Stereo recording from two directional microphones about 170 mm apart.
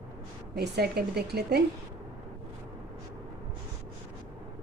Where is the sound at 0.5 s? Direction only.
70° right (ahead or behind).